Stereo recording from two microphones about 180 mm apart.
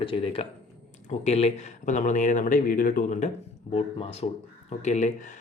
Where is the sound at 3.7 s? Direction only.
35° left (ahead or behind).